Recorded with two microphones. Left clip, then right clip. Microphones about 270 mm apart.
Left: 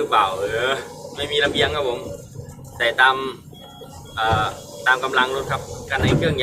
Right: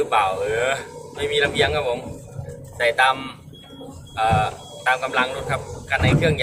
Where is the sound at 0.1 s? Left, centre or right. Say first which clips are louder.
Left 1 dB; centre.